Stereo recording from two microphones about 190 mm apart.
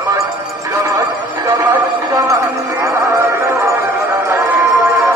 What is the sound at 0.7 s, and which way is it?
Music, 20° right (ahead or behind).